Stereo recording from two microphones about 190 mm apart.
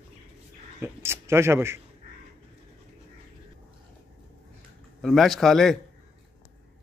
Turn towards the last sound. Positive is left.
turn(degrees=0)  # may be behind; listen again after turning